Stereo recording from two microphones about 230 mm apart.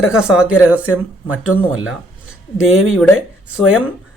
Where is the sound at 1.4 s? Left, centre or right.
Left.